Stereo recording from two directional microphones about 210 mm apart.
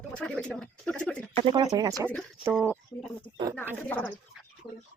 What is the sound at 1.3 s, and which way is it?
Speech, 25° right (ahead or behind).